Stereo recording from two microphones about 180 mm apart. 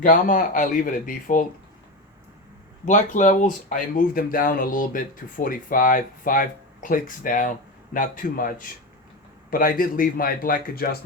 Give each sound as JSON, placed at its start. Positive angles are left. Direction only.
{"t": 0.0, "sound": "speech", "side_deg": 50}
{"t": 2.8, "sound": "speech", "side_deg": 45}